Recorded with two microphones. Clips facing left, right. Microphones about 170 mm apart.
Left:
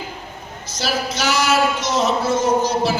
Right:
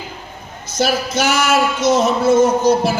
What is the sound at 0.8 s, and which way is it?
Speech, 50° right (ahead or behind).